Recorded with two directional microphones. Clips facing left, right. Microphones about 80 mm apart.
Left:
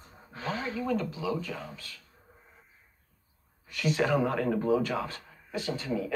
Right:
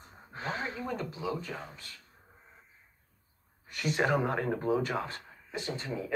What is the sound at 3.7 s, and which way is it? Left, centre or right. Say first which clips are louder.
Speech: left 2 dB; right.